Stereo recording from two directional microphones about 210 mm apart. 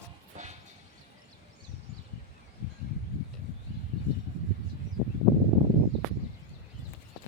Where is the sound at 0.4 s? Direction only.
35° right (ahead or behind).